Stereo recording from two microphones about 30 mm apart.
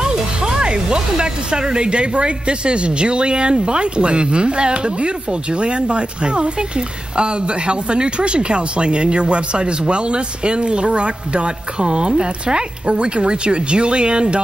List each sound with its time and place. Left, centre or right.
0.0 s speech: right